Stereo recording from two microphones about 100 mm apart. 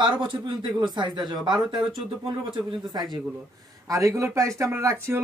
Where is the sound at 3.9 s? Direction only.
35° right (ahead or behind).